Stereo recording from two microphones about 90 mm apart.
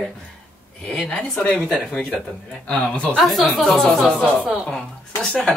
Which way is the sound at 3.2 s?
Centre (ahead or behind).